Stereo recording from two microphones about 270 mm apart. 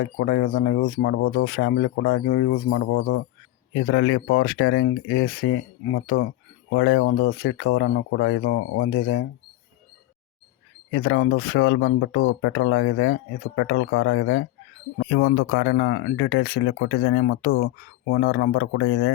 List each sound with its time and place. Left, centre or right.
0.0 s speech: left
10.9 s speech: left